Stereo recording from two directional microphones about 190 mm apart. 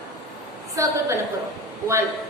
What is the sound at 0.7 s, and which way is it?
Speech, 15° right (ahead or behind).